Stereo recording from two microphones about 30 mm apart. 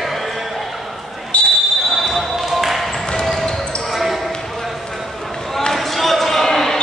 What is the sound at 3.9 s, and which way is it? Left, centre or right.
Basketball bounce, centre.